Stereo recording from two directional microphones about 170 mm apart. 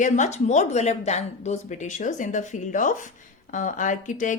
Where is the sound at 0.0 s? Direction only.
45° left (ahead or behind).